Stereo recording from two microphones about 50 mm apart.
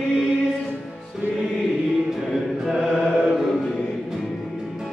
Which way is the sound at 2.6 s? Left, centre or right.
Centre.